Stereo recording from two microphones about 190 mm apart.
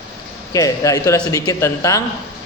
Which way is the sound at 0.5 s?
15° left (ahead or behind).